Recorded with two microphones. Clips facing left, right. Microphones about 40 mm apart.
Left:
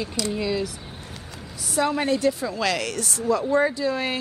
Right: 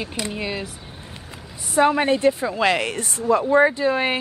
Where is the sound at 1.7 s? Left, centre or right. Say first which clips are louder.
Right 5 dB; right.